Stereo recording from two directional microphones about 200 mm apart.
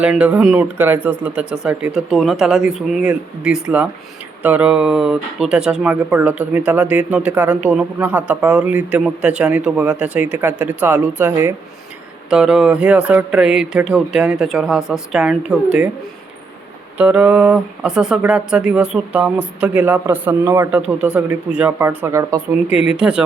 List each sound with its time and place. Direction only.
0.0 s speech: 5° right (ahead or behind)
17.0 s speech: 5° right (ahead or behind)
22.7 s speech: 30° left (ahead or behind)
23.0 s speech: 5° right (ahead or behind)